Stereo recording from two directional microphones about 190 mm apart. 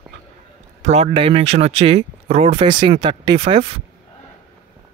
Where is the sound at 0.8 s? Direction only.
35° right (ahead or behind).